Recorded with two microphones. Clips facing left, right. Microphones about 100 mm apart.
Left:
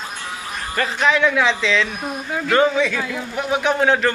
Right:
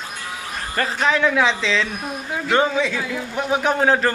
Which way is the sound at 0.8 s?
35° right (ahead or behind).